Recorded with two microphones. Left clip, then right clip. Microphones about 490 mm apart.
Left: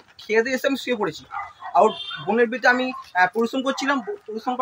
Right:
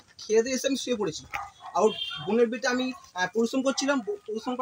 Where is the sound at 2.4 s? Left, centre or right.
Right.